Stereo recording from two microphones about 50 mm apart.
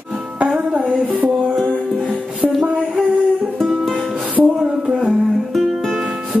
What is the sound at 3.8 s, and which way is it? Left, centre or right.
Music, centre.